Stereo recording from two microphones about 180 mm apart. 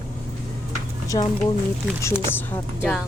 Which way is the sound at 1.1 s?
30° left (ahead or behind).